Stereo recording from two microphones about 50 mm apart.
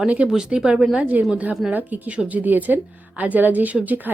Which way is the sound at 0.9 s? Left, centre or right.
Right.